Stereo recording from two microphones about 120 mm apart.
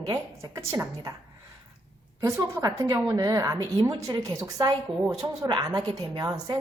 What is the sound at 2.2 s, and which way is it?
A woman's voice, 30° right (ahead or behind).